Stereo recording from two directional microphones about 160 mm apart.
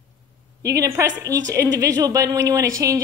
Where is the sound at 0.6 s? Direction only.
20° right (ahead or behind).